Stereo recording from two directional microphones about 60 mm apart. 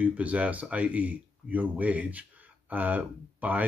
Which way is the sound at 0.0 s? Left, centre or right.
Right.